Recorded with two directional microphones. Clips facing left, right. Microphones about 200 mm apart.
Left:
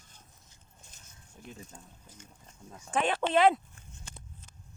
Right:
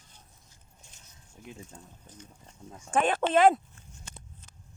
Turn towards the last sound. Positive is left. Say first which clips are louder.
# right 3 dB
turn(degrees=-45)  # may be behind; listen again after turning